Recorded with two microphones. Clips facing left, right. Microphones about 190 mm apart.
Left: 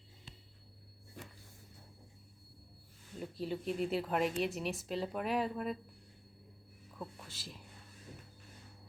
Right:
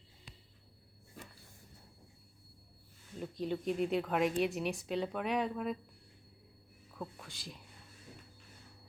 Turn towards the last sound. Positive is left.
turn(degrees=0)  # may be behind; listen again after turning